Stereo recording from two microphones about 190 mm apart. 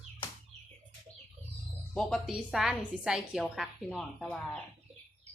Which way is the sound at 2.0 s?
Centre (ahead or behind).